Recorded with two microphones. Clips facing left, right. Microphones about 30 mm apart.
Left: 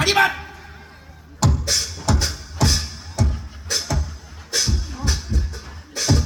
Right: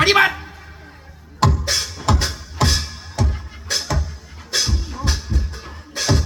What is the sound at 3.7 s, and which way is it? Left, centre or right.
Music, right.